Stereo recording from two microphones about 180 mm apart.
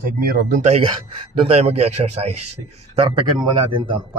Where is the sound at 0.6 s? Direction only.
40° right (ahead or behind).